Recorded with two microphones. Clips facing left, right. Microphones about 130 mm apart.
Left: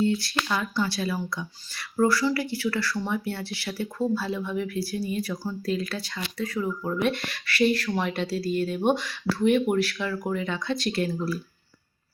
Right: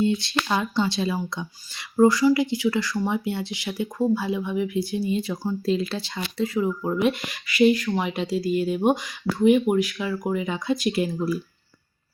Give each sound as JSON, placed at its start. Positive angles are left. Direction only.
{"t": 0.0, "sound": "speech", "side_deg": -20}